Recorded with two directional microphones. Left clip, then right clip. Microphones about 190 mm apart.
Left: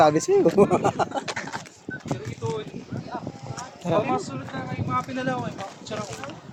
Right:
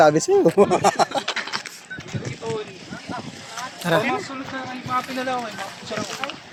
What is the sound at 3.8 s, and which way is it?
Speech, 10° right (ahead or behind).